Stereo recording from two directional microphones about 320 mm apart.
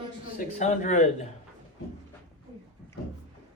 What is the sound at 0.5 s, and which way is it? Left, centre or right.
Speech, left.